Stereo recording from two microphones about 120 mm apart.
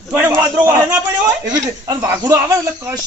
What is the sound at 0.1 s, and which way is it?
Speech, 20° right (ahead or behind).